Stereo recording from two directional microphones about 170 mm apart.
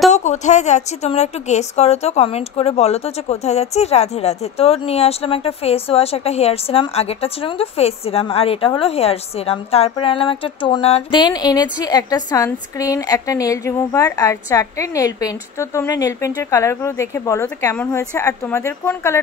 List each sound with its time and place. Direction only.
0.1 s a woman's voice: 45° left (ahead or behind); by 19.1 s 15° left (ahead or behind)